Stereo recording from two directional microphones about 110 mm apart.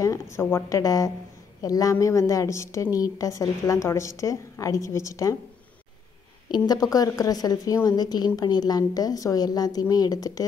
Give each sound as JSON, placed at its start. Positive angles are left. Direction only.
{"t": 0.0, "sound": "a woman's voice", "side_deg": 25}
{"t": 6.5, "sound": "a woman's voice", "side_deg": 40}